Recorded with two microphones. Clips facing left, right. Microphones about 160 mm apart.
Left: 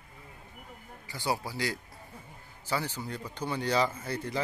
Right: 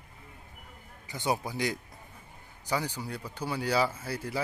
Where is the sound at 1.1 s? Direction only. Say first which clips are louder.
Right 2 dB; 20° right (ahead or behind).